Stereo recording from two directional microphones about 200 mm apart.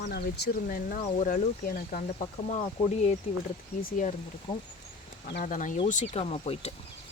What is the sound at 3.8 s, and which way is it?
Speech, 45° left (ahead or behind).